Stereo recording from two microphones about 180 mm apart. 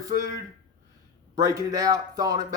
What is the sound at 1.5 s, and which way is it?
Speech, 20° right (ahead or behind).